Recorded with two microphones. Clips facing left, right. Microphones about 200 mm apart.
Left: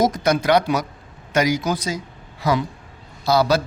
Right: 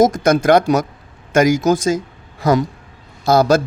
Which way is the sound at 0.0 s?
45° right (ahead or behind).